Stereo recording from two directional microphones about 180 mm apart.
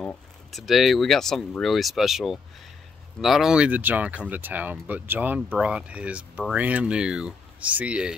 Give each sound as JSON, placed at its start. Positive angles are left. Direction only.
{"t": 0.0, "sound": "speech", "side_deg": 5}